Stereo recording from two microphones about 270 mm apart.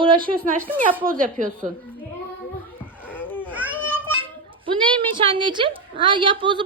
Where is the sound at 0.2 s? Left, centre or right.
Right.